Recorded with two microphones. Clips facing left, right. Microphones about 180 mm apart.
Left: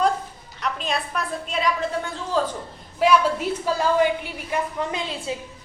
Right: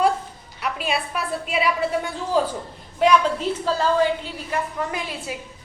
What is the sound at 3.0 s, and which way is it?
A woman's voice, 5° left (ahead or behind).